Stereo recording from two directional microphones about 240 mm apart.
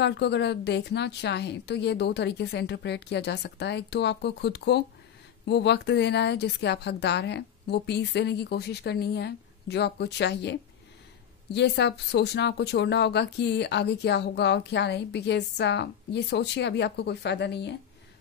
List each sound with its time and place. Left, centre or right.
0.0 s speech: left
11.5 s speech: left